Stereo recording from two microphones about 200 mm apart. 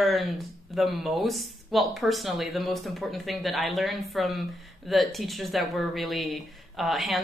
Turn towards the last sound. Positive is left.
turn(degrees=0)  # may be behind; listen again after turning